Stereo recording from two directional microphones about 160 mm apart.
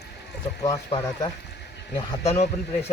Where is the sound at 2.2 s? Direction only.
45° left (ahead or behind).